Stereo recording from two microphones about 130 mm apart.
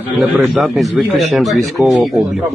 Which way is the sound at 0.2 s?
10° right (ahead or behind).